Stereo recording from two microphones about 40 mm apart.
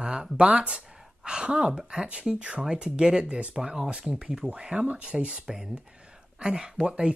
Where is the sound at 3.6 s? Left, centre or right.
Centre.